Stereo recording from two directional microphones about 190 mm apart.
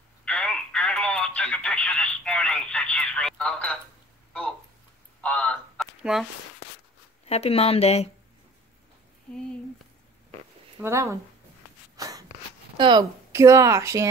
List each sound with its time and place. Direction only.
0.2 s telephone: 5° left (ahead or behind)
4.3 s a sound: 5° left (ahead or behind)
7.2 s a woman's voice: 30° left (ahead or behind)
10.8 s speech: 15° right (ahead or behind)
12.0 s a sound: 20° right (ahead or behind)
12.7 s speech: 25° right (ahead or behind)